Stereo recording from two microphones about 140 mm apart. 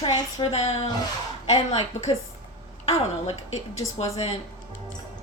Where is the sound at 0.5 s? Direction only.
45° left (ahead or behind).